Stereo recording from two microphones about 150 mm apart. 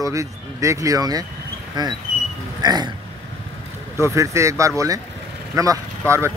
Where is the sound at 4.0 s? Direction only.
20° right (ahead or behind).